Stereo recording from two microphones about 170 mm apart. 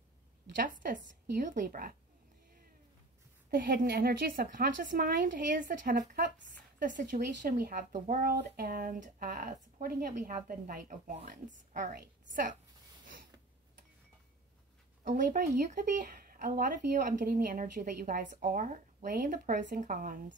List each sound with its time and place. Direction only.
0.6 s a woman's voice: 50° right (ahead or behind)
3.4 s a woman's voice: 60° right (ahead or behind)
15.0 s a woman's voice: 50° right (ahead or behind)